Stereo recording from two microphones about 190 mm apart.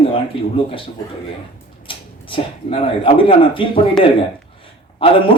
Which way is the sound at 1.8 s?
25° left (ahead or behind).